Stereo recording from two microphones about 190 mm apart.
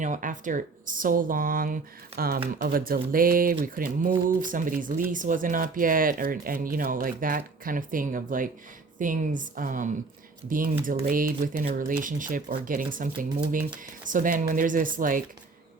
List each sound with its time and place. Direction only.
0.0 s speech: 45° right (ahead or behind)